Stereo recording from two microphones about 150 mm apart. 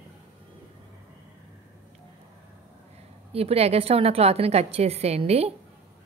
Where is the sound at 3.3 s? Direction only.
40° right (ahead or behind).